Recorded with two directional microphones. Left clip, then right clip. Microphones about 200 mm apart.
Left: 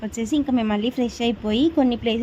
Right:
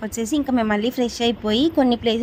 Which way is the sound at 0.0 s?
15° right (ahead or behind).